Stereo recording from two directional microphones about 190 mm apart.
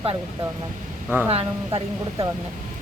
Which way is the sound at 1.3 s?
30° right (ahead or behind).